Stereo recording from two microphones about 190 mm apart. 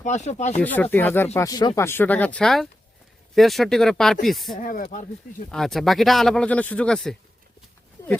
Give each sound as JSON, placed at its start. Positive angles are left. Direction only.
{"t": 0.0, "sound": "speech", "side_deg": 40}
{"t": 0.6, "sound": "speech", "side_deg": 10}
{"t": 4.5, "sound": "speech", "side_deg": 50}
{"t": 5.5, "sound": "speech", "side_deg": 0}
{"t": 8.0, "sound": "a sound", "side_deg": 15}